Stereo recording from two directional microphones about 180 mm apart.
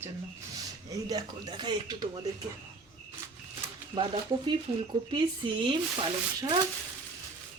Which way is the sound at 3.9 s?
25° right (ahead or behind).